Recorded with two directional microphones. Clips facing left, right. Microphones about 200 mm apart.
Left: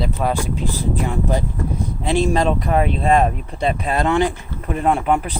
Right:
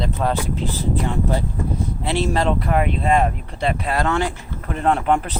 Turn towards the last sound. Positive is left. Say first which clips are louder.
# left 1 dB
turn(degrees=10)  # may be behind; listen again after turning